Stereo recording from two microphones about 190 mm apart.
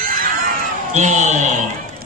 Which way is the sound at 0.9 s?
40° right (ahead or behind).